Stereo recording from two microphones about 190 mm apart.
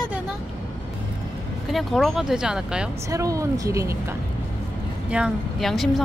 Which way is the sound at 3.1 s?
15° right (ahead or behind).